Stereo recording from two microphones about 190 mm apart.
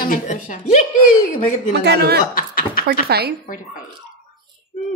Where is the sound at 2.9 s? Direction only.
55° right (ahead or behind).